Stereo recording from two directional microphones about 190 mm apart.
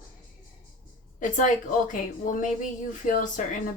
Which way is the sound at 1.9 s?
40° left (ahead or behind).